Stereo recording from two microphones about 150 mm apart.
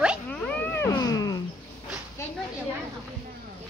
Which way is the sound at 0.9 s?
25° left (ahead or behind).